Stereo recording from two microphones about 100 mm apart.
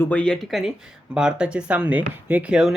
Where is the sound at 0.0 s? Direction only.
15° left (ahead or behind).